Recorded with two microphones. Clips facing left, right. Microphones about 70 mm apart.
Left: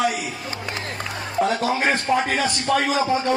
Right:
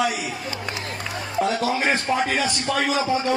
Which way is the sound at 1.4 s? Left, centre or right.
Left.